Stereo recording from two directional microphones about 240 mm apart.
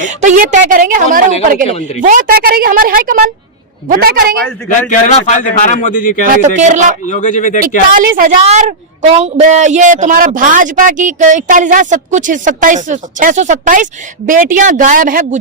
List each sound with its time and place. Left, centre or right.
0.0 s a woman's voice: right
1.6 s speech: left
2.0 s a woman's voice: right
4.9 s speech: left
6.2 s a woman's voice: right
7.1 s speech: left
7.9 s a woman's voice: right